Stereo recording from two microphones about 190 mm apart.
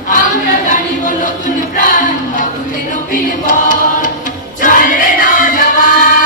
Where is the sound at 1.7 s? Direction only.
45° left (ahead or behind).